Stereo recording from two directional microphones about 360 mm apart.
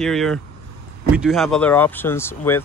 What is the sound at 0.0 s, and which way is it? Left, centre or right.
Speech, centre.